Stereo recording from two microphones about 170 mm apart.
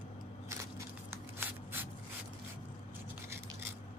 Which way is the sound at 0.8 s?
10° right (ahead or behind).